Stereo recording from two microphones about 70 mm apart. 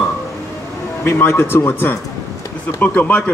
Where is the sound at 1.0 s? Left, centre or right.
Left.